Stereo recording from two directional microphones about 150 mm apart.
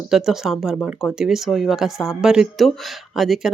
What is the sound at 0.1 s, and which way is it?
Speech, 5° right (ahead or behind).